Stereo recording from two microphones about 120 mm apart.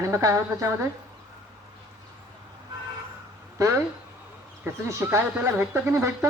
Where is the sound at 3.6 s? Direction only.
25° right (ahead or behind).